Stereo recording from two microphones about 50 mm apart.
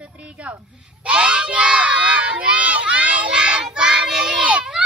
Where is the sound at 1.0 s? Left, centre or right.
Right.